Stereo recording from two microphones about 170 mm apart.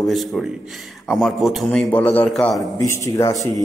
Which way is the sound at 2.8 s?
15° left (ahead or behind).